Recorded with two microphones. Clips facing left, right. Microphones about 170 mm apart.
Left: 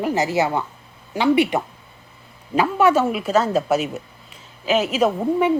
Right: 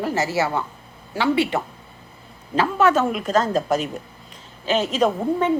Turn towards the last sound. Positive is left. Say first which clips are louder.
# left 2 dB
turn(degrees=10)  # may be behind; listen again after turning